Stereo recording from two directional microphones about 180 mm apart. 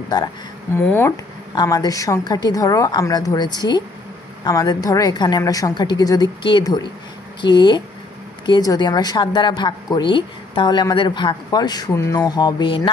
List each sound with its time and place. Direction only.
0.7 s a woman's voice: 10° left (ahead or behind); by 12.9 s 30° left (ahead or behind)